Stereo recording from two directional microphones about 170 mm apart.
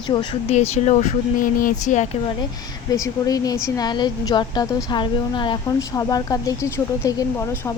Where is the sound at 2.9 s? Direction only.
20° left (ahead or behind).